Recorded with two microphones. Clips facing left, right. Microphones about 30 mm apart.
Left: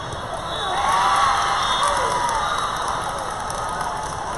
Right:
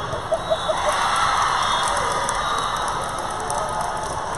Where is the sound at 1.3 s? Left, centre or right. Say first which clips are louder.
Even; centre.